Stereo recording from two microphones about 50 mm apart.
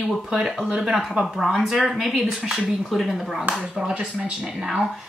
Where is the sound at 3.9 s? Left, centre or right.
Right.